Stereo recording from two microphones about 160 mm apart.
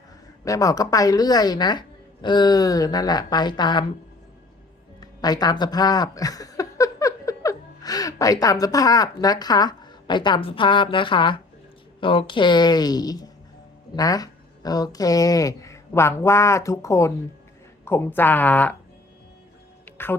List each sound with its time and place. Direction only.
0.4 s speech: 20° left (ahead or behind)
4.9 s a woman's voice: 25° left (ahead or behind)
20.0 s a woman's voice: 15° left (ahead or behind)